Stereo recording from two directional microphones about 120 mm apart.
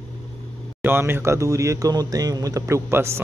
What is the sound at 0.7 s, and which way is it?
Speech, 20° right (ahead or behind).